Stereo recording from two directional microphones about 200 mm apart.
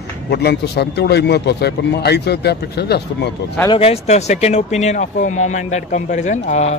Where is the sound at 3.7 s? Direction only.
30° left (ahead or behind).